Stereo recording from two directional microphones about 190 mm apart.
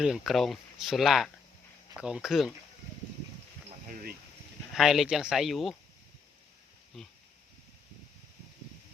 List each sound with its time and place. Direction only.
0.0 s speech: centre (ahead or behind)
3.7 s a sound: 45° right (ahead or behind)
4.7 s speech: centre (ahead or behind)
6.9 s speech: centre (ahead or behind)